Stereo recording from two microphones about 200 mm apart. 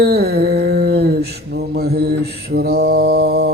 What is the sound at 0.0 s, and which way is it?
Mantra, 55° right (ahead or behind).